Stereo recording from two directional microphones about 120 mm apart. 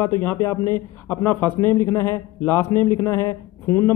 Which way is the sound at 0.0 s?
20° left (ahead or behind).